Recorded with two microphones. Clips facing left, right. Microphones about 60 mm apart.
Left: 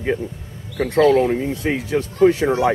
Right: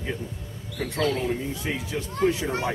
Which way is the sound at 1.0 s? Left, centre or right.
Left.